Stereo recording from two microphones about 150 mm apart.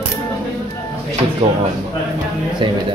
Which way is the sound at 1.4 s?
40° right (ahead or behind).